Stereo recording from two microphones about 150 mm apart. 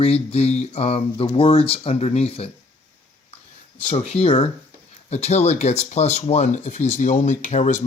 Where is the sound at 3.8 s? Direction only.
45° left (ahead or behind).